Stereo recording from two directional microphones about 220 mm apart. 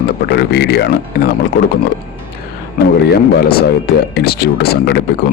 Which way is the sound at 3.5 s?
45° left (ahead or behind).